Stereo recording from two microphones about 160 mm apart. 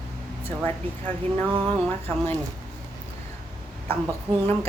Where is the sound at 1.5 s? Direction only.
35° right (ahead or behind).